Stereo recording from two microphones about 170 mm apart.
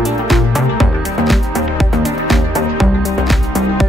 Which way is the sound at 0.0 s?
Centre (ahead or behind).